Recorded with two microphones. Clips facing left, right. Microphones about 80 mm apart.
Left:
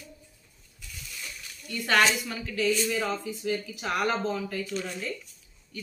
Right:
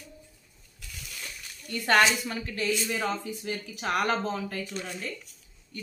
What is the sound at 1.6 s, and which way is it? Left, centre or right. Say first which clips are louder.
A woman's voice: right 1 dB; right.